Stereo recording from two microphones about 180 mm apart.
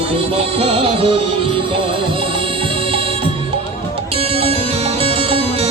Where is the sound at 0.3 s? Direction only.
35° right (ahead or behind).